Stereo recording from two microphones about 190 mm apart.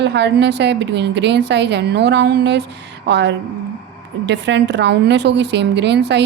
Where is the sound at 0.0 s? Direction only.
65° right (ahead or behind).